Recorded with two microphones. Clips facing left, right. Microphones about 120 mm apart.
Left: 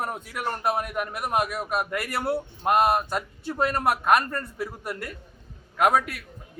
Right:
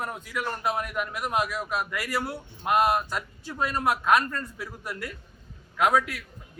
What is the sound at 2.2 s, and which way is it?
Speech, 30° left (ahead or behind).